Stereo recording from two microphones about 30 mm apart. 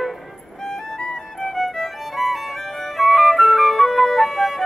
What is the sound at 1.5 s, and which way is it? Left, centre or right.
Music, centre.